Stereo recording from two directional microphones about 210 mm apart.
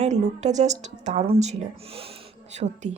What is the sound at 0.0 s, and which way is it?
A woman's voice, 30° right (ahead or behind).